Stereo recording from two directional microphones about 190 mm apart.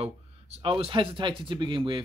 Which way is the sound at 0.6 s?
30° right (ahead or behind).